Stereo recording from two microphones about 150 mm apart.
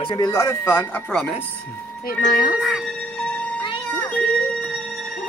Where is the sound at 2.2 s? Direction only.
65° left (ahead or behind).